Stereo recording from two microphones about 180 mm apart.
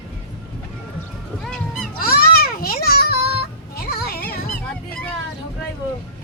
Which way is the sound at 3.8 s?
55° left (ahead or behind).